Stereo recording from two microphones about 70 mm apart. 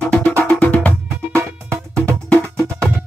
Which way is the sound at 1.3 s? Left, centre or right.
Right.